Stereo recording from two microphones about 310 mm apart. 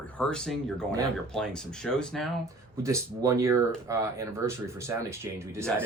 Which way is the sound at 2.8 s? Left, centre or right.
Centre.